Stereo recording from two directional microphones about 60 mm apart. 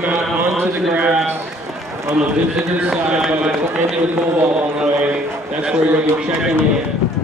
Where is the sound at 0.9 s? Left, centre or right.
Right.